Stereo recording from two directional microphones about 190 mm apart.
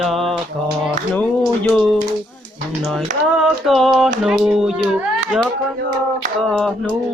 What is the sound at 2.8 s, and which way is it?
Speech, centre (ahead or behind).